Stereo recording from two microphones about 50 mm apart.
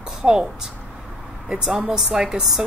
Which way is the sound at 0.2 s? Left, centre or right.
Centre.